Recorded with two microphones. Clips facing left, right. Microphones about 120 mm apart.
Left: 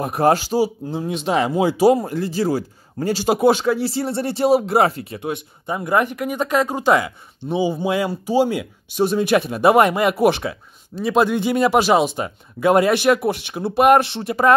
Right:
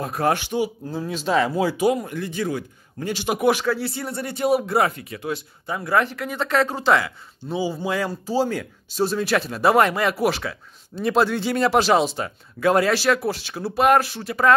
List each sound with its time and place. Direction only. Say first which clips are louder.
0.0 s speech: left 5 dB; 30° left (ahead or behind)